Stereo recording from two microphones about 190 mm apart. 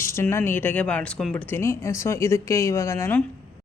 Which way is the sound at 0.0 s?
15° left (ahead or behind).